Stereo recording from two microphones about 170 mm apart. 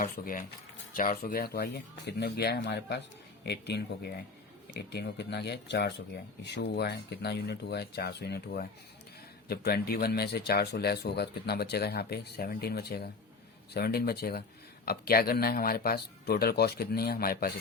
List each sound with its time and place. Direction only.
0.0 s speech: 55° left (ahead or behind)